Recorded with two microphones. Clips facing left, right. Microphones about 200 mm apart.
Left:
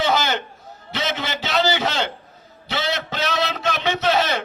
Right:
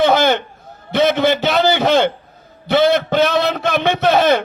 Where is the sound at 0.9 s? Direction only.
55° right (ahead or behind).